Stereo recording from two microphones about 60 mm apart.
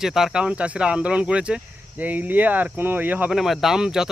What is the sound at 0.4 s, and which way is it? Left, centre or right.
Speech, right.